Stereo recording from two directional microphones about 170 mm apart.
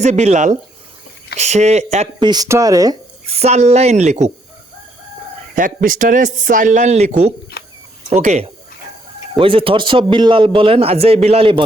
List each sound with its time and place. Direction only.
0.0 s a man's voice: 40° right (ahead or behind)
2.1 s speech: 25° right (ahead or behind)
3.2 s a man's voice: 40° right (ahead or behind)
5.5 s speech: 55° right (ahead or behind)
7.6 s cricket: 70° left (ahead or behind)
8.1 s speech: 40° right (ahead or behind)
9.4 s a man's voice: 30° right (ahead or behind)